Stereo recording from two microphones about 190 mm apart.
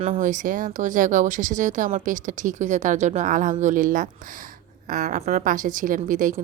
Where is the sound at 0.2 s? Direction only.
45° right (ahead or behind).